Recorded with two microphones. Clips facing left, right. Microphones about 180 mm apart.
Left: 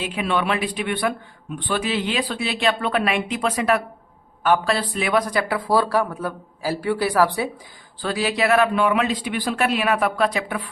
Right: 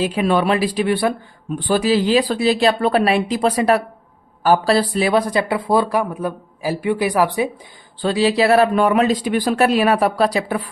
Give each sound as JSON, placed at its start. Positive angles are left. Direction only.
{"t": 0.0, "sound": "speech", "side_deg": -40}
{"t": 7.9, "sound": "speech", "side_deg": -30}